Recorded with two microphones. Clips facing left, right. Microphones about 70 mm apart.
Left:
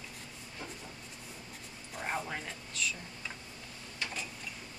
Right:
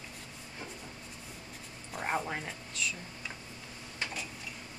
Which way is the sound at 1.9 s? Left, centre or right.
Centre.